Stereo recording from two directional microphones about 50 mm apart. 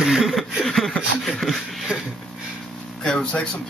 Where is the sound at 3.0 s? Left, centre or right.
Centre.